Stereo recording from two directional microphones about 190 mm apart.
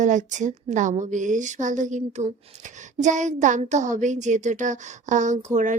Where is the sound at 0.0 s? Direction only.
40° right (ahead or behind).